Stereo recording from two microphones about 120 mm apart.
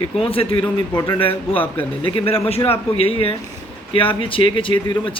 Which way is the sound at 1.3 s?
15° left (ahead or behind).